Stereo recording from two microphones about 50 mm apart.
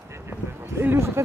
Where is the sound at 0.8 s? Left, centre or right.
Right.